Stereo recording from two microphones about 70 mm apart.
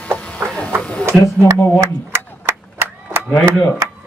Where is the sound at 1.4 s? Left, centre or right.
Right.